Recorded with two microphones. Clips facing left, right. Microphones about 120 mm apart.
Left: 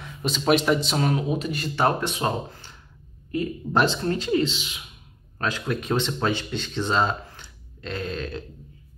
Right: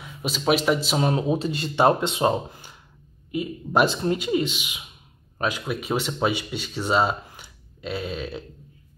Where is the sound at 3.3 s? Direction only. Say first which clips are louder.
Right 1 dB; 10° right (ahead or behind).